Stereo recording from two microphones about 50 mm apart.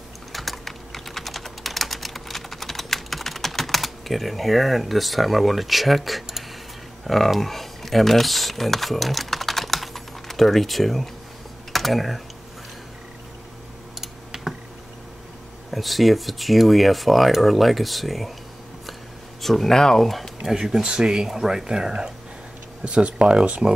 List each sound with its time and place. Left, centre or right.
0.3 s typing: centre
7.1 s speech: centre
14.0 s typing: centre
15.7 s speech: centre
19.4 s speech: centre
20.5 s speech: centre